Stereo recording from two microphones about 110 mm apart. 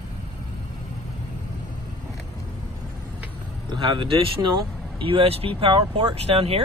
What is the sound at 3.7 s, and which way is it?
Speech, 50° right (ahead or behind).